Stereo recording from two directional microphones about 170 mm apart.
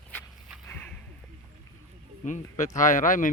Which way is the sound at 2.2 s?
45° left (ahead or behind).